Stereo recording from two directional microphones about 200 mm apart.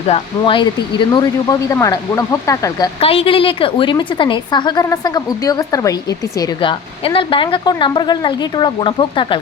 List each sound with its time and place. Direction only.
0.1 s speech: 25° left (ahead or behind)